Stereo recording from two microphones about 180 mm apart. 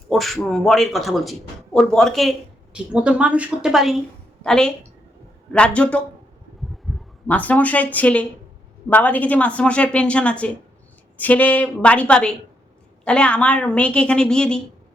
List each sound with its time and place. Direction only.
0.1 s a woman's voice: centre (ahead or behind)